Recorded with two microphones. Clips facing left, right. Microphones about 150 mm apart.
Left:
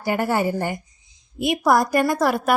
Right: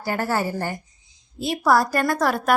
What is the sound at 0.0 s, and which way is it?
A woman's voice, 15° left (ahead or behind).